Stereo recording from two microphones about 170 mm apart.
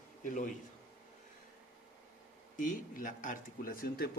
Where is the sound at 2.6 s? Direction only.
50° left (ahead or behind).